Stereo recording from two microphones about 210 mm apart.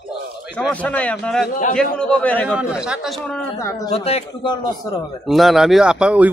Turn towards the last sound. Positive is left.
turn(degrees=-5)  # may be behind; listen again after turning